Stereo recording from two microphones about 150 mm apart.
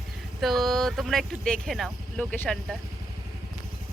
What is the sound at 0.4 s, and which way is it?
Speech, centre (ahead or behind).